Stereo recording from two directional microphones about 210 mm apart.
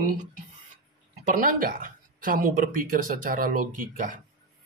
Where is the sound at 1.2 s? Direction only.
40° right (ahead or behind).